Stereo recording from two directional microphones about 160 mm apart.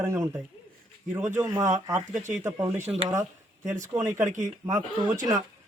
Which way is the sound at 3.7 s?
50° right (ahead or behind).